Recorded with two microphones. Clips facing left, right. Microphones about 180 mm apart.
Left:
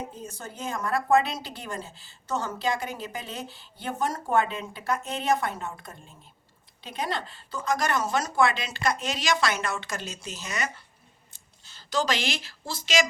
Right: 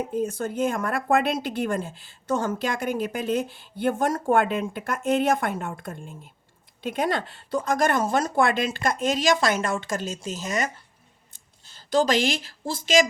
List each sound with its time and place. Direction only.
0.1 s speech: 55° right (ahead or behind)